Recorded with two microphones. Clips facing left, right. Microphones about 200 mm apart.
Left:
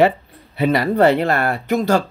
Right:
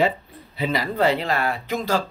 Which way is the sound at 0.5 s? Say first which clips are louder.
Left 7 dB; 55° left (ahead or behind).